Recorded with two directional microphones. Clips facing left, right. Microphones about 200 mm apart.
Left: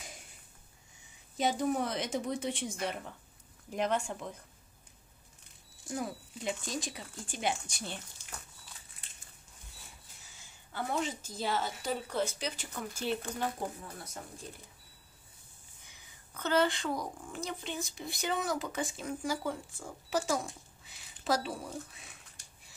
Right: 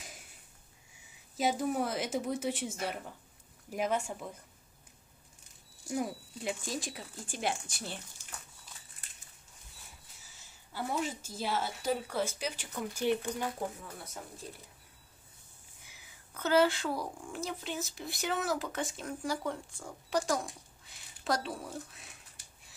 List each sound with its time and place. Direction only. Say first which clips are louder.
1.3 s a woman's voice: even; centre (ahead or behind)
5.9 s a woman's voice: right 3 dB; 5° right (ahead or behind)
10.2 s a woman's voice: left 1 dB; 5° right (ahead or behind)
15.9 s a woman's voice: right 1 dB; 5° right (ahead or behind)